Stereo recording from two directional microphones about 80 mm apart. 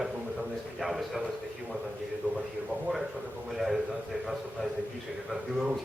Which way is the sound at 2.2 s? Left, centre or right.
Right.